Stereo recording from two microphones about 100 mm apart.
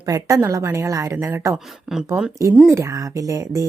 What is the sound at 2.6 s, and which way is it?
Speech, 30° right (ahead or behind).